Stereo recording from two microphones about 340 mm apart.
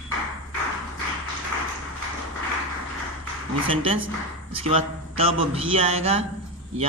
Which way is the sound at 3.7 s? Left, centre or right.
Centre.